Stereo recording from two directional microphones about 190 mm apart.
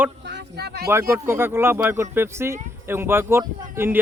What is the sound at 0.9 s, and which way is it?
Speech, 15° right (ahead or behind).